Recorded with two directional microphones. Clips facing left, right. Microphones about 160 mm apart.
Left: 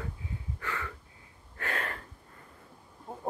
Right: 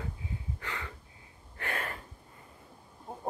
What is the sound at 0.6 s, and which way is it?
Wheeze, 20° right (ahead or behind).